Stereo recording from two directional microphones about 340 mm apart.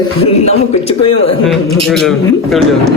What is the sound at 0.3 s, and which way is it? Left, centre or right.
Speech, centre.